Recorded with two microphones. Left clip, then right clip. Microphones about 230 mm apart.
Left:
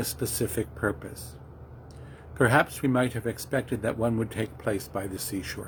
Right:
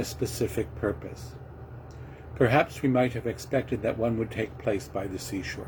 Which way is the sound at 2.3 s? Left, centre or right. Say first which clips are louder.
Left 1 dB; left.